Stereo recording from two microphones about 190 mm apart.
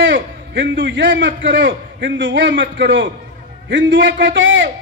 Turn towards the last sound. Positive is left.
turn(degrees=-75)  # may be behind; listen again after turning